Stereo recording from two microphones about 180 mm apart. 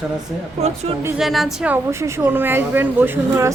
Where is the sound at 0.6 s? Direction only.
35° right (ahead or behind).